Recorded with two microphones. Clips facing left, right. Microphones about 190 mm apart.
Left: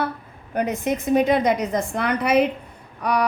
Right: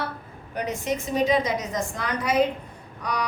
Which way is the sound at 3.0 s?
60° left (ahead or behind).